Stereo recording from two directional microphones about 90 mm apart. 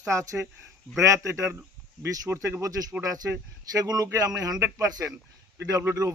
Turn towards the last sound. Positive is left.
turn(degrees=-35)  # may be behind; listen again after turning